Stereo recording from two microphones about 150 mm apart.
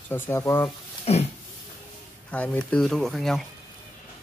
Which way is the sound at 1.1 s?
45° left (ahead or behind).